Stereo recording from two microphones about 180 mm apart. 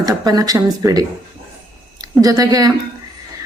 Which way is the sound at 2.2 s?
20° right (ahead or behind).